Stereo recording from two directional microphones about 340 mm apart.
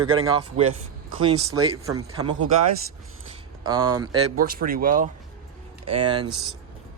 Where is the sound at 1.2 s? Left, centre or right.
Centre.